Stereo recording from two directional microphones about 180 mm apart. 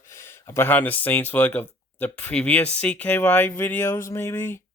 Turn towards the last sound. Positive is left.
turn(degrees=15)  # may be behind; listen again after turning